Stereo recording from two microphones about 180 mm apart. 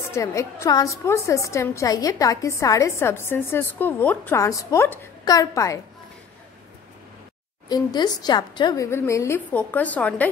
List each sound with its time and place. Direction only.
0.1 s a woman's voice: 15° left (ahead or behind)
7.6 s a woman's voice: 25° left (ahead or behind)